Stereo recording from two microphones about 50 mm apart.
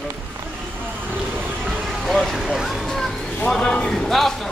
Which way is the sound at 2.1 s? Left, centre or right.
Centre.